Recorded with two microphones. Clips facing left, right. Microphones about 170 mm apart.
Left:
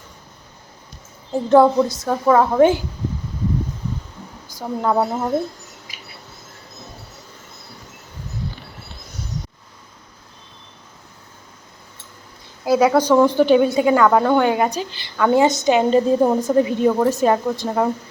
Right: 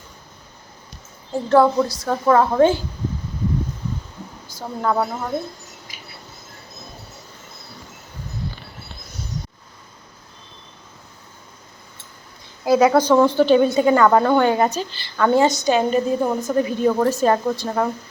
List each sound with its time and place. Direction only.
1.3 s a woman's voice: 20° left (ahead or behind)
4.4 s a woman's voice: 15° left (ahead or behind)
12.6 s a woman's voice: 5° left (ahead or behind)